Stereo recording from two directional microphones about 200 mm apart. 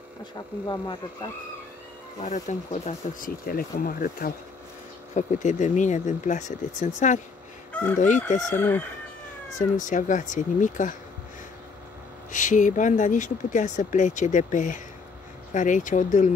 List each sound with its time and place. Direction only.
0.7 s speech: 20° left (ahead or behind)
2.2 s speech: 35° left (ahead or behind)
8.5 s crowing: 10° left (ahead or behind)
9.6 s speech: 40° left (ahead or behind)
12.3 s speech: 40° left (ahead or behind)